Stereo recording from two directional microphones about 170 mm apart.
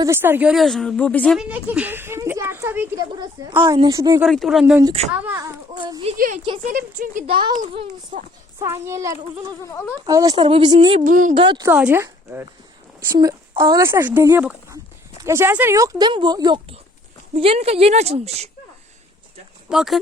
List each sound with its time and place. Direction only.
0.0 s a woman's voice: 15° right (ahead or behind); by 1.4 s 5° left (ahead or behind)
1.4 s speech: 5° right (ahead or behind)
3.6 s speech: 25° right (ahead or behind)
4.2 s a woman's voice: centre (ahead or behind)
5.4 s speech: 20° right (ahead or behind)
6.1 s speech: 55° right (ahead or behind)
7.3 s speech: 30° right (ahead or behind)
8.5 s speech: 15° right (ahead or behind)
11.0 s speech: 50° right (ahead or behind)
11.3 s speech: 25° right (ahead or behind)
11.6 s speech: 10° right (ahead or behind)
13.1 s speech: 30° right (ahead or behind)
13.6 s speech: 15° right (ahead or behind); by 18.4 s 40° right (ahead or behind)
19.7 s a woman's voice: centre (ahead or behind)